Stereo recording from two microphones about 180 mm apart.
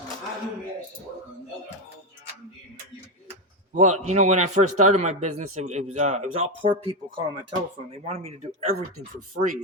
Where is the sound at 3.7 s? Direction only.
40° right (ahead or behind).